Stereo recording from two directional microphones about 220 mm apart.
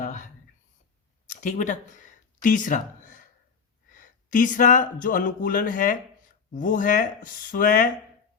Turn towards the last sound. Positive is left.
turn(degrees=35)  # may be behind; listen again after turning